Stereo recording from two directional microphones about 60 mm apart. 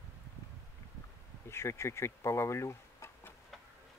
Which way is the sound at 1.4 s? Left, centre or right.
Left.